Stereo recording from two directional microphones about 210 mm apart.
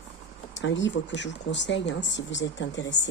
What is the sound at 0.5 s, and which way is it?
Speech, 60° left (ahead or behind).